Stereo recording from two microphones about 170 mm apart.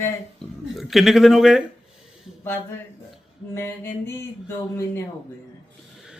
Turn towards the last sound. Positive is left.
turn(degrees=15)  # may be behind; listen again after turning